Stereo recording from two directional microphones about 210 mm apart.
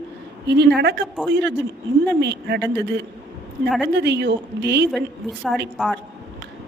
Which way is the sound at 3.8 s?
55° right (ahead or behind).